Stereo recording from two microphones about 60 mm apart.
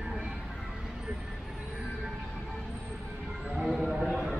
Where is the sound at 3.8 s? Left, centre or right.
Centre.